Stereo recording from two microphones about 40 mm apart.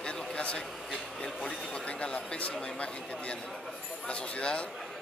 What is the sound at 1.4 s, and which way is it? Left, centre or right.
Speech, centre.